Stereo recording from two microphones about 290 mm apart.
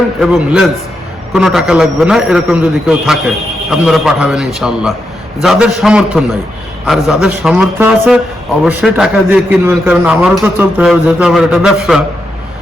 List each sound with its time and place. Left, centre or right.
0.2 s a man's voice: centre